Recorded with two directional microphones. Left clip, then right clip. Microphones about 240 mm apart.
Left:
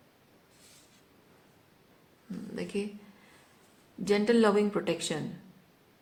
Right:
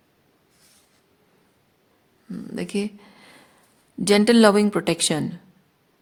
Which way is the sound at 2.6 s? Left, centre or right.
Right.